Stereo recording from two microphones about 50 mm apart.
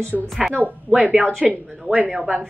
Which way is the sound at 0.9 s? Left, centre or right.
Centre.